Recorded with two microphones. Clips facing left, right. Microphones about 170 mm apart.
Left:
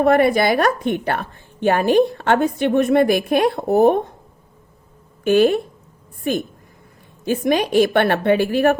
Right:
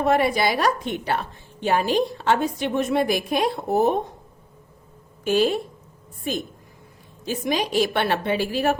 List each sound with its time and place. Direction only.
0.0 s a woman's voice: 55° left (ahead or behind)
5.2 s a woman's voice: 60° left (ahead or behind)